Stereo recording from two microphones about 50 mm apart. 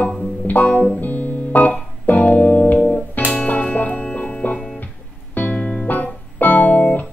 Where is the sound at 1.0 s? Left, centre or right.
Left.